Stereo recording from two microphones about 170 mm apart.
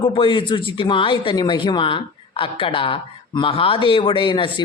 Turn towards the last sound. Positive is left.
turn(degrees=30)  # may be behind; listen again after turning